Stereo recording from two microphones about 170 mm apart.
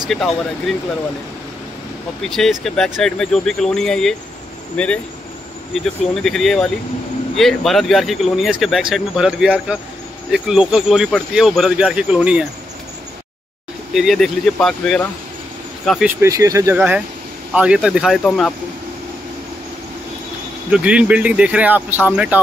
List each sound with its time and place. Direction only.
0.1 s speech: centre (ahead or behind)
2.2 s speech: centre (ahead or behind)
6.2 s speech: centre (ahead or behind)
13.9 s speech: centre (ahead or behind)
16.1 s speech: 15° right (ahead or behind); by 18.5 s 5° left (ahead or behind)
20.7 s speech: 5° right (ahead or behind)